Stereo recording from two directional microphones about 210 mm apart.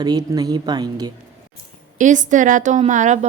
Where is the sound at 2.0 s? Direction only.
35° right (ahead or behind).